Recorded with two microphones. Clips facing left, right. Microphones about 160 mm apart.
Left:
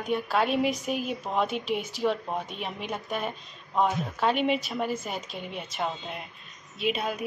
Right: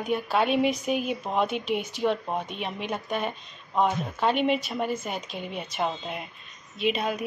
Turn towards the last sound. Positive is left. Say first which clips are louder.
# right 2 dB
turn(degrees=0)  # may be behind; listen again after turning